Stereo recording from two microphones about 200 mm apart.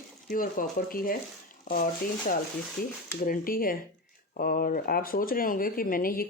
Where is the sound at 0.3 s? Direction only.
45° left (ahead or behind).